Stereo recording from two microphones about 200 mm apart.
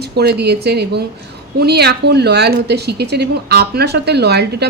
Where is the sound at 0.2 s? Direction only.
55° right (ahead or behind).